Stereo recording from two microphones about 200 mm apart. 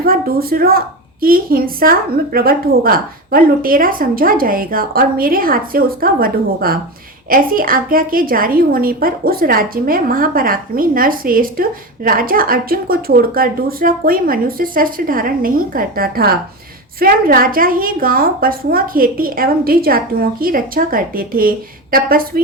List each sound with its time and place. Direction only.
0.0 s a woman's voice: 50° right (ahead or behind)